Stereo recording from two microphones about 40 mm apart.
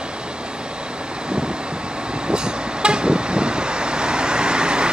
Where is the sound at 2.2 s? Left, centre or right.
Right.